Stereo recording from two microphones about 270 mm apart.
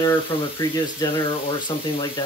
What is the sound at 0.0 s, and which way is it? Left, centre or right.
Speech, centre.